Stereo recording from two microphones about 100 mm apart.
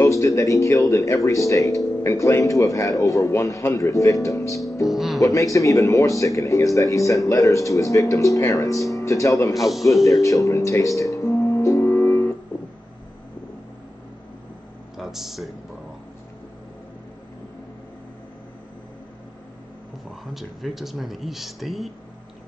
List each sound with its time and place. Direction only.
0.0 s speech: 30° left (ahead or behind)
4.8 s speech: centre (ahead or behind)
5.2 s speech: 35° left (ahead or behind)
9.5 s speech: centre (ahead or behind)
10.0 s music: 35° left (ahead or behind)
15.0 s speech: 5° right (ahead or behind)
20.3 s speech: centre (ahead or behind)